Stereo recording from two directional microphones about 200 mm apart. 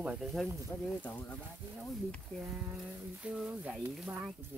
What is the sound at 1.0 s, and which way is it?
Speech, 5° left (ahead or behind).